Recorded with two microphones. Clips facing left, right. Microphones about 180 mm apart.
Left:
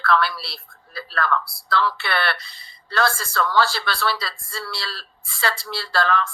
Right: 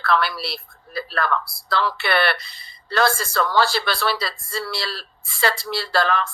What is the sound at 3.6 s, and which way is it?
Speech, 15° right (ahead or behind).